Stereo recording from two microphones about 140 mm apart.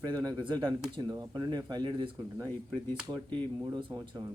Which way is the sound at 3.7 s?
35° right (ahead or behind).